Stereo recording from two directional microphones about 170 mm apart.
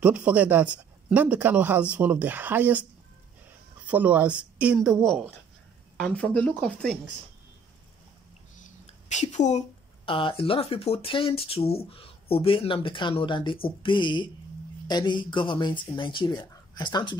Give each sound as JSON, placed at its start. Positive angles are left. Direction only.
{"t": 0.0, "sound": "speech", "side_deg": -10}
{"t": 5.9, "sound": "speech", "side_deg": 5}
{"t": 8.5, "sound": "a sound", "side_deg": 45}
{"t": 10.0, "sound": "speech", "side_deg": 30}